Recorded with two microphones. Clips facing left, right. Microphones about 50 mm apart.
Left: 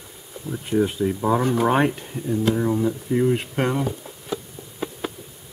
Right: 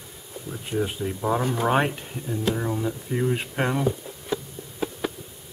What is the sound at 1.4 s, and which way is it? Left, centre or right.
Speech, left.